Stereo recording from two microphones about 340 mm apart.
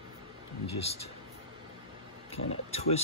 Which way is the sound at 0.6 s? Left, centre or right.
Centre.